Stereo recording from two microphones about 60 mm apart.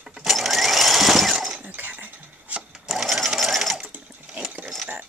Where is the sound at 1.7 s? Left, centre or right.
Right.